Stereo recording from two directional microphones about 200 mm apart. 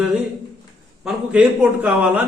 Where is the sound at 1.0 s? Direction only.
5° right (ahead or behind).